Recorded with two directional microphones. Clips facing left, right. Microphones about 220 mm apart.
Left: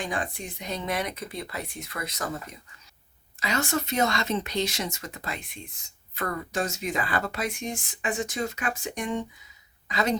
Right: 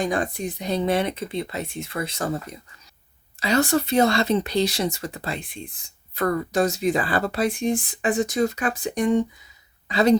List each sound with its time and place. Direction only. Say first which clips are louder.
0.0 s speech: right 7 dB; 40° right (ahead or behind)